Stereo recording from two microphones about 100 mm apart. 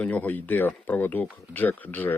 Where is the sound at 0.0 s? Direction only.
15° left (ahead or behind).